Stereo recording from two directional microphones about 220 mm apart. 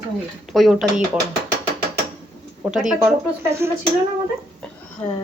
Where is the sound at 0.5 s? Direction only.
Centre (ahead or behind).